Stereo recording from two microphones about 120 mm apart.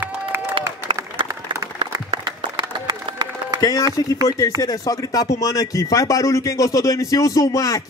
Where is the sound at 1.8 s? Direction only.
45° right (ahead or behind).